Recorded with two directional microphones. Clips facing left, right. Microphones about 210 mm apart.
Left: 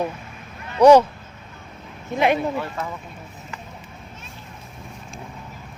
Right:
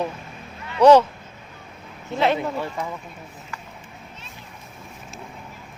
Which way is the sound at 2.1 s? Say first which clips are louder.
Left 1 dB; 15° left (ahead or behind).